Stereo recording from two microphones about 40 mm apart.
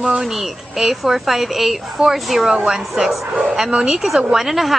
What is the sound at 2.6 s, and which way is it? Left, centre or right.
A woman's voice, centre.